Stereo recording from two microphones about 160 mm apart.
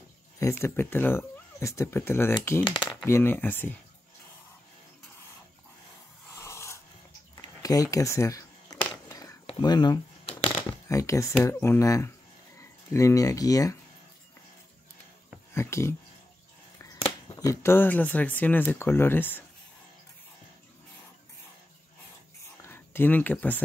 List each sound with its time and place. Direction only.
0.4 s speech: 15° left (ahead or behind)
2.7 s typing: 30° left (ahead or behind)
3.1 s speech: 15° left (ahead or behind)
6.3 s a sound: 15° left (ahead or behind)
11.4 s speech: 15° left (ahead or behind)
15.5 s a sound: 15° left (ahead or behind)
16.7 s speech: 20° left (ahead or behind)
22.6 s speech: 15° left (ahead or behind)